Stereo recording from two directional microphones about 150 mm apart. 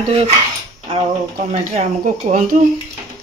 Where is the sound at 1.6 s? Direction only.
55° right (ahead or behind).